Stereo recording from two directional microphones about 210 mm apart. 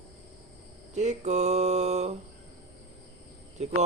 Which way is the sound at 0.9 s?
35° right (ahead or behind).